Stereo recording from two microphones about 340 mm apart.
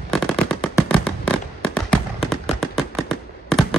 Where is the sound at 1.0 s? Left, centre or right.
Centre.